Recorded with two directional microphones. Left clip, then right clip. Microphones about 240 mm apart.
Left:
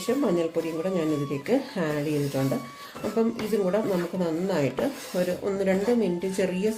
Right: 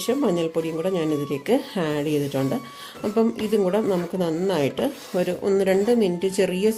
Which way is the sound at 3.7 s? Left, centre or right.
Right.